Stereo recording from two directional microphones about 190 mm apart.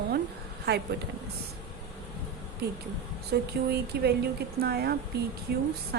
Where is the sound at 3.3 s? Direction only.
55° right (ahead or behind).